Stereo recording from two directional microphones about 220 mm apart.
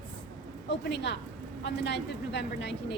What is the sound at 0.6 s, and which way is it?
A woman's voice, 50° left (ahead or behind).